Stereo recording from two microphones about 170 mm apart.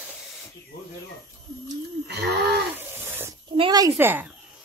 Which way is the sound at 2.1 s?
75° right (ahead or behind).